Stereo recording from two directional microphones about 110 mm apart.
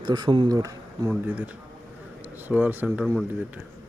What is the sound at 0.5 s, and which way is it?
Speech, 30° right (ahead or behind).